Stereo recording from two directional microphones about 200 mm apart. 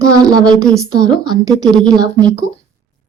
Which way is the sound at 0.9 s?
20° right (ahead or behind).